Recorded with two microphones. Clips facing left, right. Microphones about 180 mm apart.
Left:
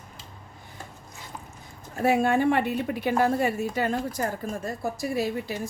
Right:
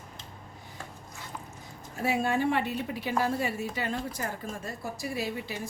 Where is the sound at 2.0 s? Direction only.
55° left (ahead or behind).